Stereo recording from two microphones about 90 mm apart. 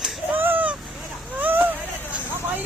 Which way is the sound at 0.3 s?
20° right (ahead or behind).